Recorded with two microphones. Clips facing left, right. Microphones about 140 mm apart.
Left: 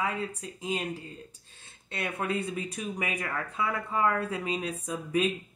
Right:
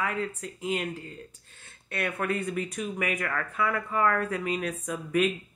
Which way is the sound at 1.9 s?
20° left (ahead or behind).